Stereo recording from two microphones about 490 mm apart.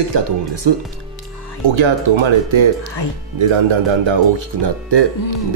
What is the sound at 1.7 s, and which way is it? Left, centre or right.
Speech, right.